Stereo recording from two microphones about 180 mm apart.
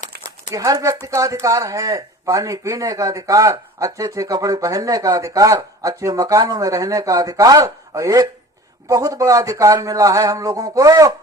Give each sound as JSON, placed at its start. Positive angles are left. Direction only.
{"t": 0.5, "sound": "speech", "side_deg": -20}